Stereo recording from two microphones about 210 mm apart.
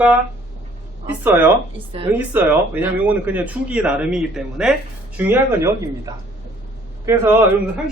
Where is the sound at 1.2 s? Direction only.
10° right (ahead or behind).